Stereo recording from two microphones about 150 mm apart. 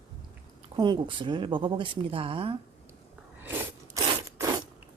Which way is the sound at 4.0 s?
25° right (ahead or behind).